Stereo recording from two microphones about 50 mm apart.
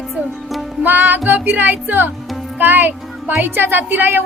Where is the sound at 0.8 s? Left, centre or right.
Right.